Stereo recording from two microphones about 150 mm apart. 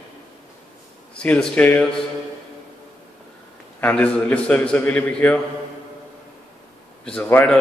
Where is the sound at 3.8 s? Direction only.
10° left (ahead or behind).